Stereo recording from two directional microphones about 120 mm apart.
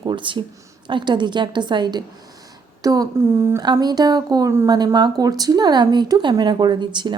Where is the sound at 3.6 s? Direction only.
35° right (ahead or behind).